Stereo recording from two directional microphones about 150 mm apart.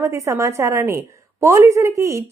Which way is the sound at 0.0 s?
20° right (ahead or behind).